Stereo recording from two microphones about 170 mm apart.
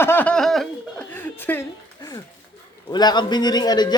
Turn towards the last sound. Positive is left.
turn(degrees=25)  # may be behind; listen again after turning